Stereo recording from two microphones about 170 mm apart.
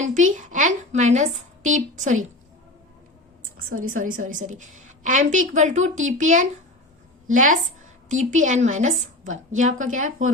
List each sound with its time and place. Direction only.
0.0 s a woman's voice: 45° right (ahead or behind)
3.8 s a woman's voice: 50° right (ahead or behind)